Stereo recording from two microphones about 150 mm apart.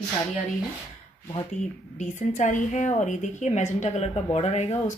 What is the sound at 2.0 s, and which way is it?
Speech, 50° left (ahead or behind).